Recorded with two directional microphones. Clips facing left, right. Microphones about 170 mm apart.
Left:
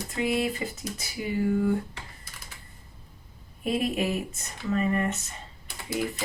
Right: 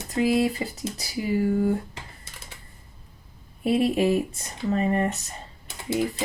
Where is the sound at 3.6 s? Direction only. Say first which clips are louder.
Right 6 dB; 30° right (ahead or behind).